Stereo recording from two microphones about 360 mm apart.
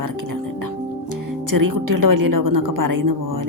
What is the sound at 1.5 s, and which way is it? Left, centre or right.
A woman's voice, right.